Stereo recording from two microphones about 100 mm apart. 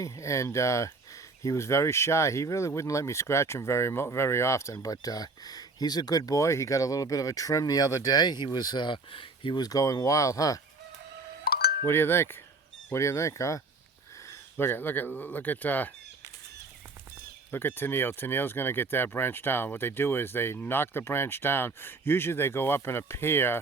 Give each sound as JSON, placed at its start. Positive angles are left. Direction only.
{"t": 0.0, "sound": "speech", "side_deg": 30}
{"t": 11.9, "sound": "speech", "side_deg": 25}
{"t": 17.5, "sound": "speech", "side_deg": 20}